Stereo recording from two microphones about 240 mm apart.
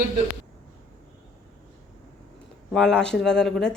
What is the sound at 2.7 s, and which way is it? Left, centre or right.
Speech, centre.